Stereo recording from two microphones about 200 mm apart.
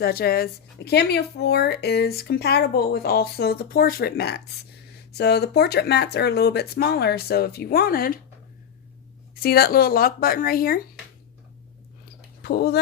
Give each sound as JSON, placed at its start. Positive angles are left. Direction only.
{"t": 0.0, "sound": "speech", "side_deg": 50}
{"t": 9.3, "sound": "speech", "side_deg": 50}
{"t": 12.4, "sound": "speech", "side_deg": 50}